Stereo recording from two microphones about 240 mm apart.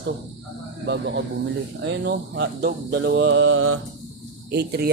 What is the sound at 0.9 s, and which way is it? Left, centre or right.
Mantra, right.